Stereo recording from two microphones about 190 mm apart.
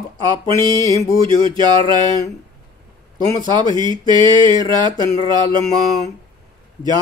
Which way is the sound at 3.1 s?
25° right (ahead or behind).